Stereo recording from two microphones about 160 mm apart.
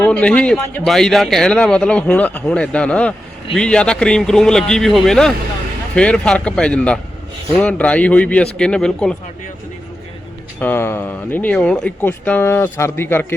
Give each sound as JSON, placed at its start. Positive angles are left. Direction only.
{"t": 0.0, "sound": "a man's voice", "side_deg": 10}
{"t": 10.6, "sound": "speech", "side_deg": 15}